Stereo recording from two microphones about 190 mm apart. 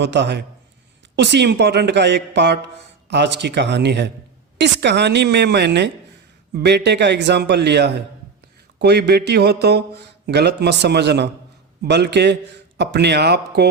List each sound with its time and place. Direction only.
0.0 s speech: 65° right (ahead or behind)